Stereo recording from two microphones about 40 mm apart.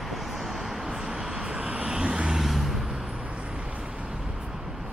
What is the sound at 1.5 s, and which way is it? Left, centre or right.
Vehicle, right.